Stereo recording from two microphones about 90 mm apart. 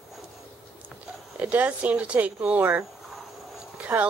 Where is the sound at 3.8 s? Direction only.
15° right (ahead or behind).